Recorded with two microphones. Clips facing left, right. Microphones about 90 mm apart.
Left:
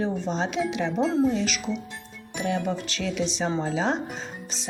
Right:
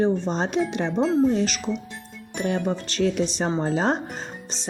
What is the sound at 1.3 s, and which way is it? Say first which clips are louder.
Speech: right 3 dB; 40° right (ahead or behind).